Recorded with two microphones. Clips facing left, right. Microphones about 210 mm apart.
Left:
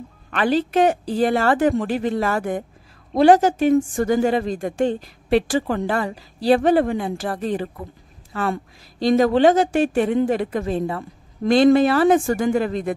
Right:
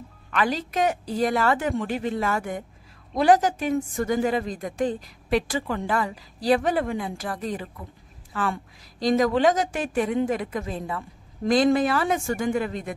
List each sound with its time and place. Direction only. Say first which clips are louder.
0.3 s a woman's voice: left 6 dB; 30° left (ahead or behind)
3.7 s a woman's voice: left 6 dB; 40° left (ahead or behind)
9.0 s a woman's voice: left 5 dB; 30° left (ahead or behind)